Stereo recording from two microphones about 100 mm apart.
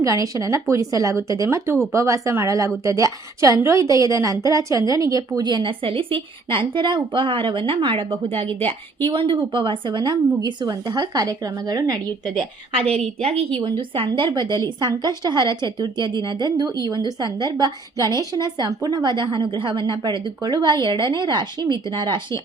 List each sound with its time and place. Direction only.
0.0 s a woman's voice: 35° right (ahead or behind)
5.4 s speech: 45° right (ahead or behind)
5.8 s a woman's voice: 65° right (ahead or behind)
9.1 s speech: 55° right (ahead or behind); by 11.9 s 35° right (ahead or behind)
12.7 s a woman's voice: 75° right (ahead or behind)
13.6 s a woman's voice: 50° right (ahead or behind)